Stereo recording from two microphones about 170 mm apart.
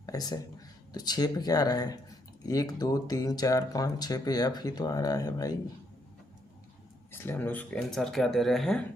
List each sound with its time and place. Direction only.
0.0 s speech: 20° left (ahead or behind)
7.1 s speech: 15° left (ahead or behind)